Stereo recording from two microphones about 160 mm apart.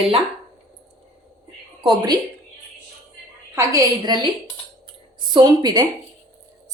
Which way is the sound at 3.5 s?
25° right (ahead or behind).